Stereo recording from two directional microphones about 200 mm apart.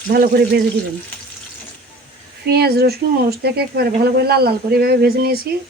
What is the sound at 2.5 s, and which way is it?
Speech, 55° right (ahead or behind).